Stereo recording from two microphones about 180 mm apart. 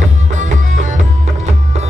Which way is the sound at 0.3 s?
40° right (ahead or behind).